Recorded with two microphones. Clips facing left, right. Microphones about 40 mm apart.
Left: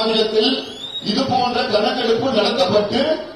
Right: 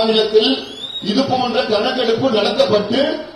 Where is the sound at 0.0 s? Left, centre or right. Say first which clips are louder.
Right 3 dB; right.